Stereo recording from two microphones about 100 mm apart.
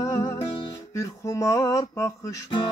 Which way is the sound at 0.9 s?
30° left (ahead or behind).